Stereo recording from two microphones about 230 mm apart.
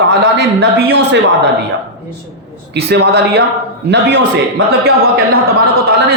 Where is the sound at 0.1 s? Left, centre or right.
Right.